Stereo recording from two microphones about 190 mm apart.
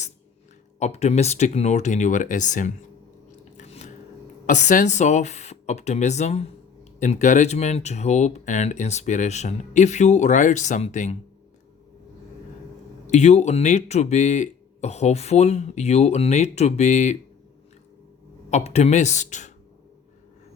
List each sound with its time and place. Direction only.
0.8 s speech: 35° left (ahead or behind)
3.6 s a sound: 35° left (ahead or behind)
4.4 s speech: 40° left (ahead or behind)
13.1 s speech: 35° left (ahead or behind)
18.5 s speech: 35° left (ahead or behind)